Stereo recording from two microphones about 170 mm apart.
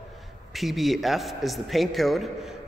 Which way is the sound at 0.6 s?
Centre (ahead or behind).